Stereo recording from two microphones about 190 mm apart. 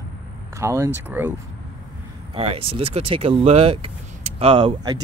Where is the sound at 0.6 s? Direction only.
15° right (ahead or behind).